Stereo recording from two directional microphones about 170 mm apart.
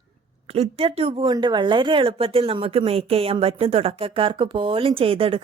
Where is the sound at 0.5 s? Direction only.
35° right (ahead or behind).